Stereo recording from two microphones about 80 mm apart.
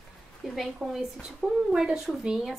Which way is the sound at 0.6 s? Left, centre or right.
Centre.